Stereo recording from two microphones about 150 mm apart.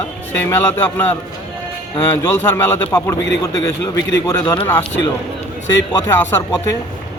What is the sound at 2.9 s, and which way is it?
Speech, 25° left (ahead or behind).